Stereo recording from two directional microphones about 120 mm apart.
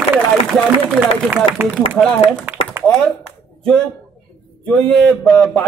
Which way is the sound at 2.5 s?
15° right (ahead or behind).